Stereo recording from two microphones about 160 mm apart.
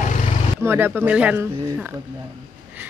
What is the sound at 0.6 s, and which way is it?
Speech, 15° right (ahead or behind).